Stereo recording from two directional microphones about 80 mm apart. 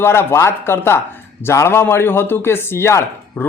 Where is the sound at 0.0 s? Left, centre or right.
Left.